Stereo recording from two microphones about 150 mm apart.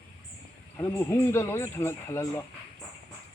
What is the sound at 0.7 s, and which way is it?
Speech, 15° left (ahead or behind).